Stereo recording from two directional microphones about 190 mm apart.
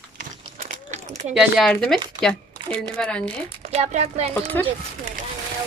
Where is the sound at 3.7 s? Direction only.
35° right (ahead or behind).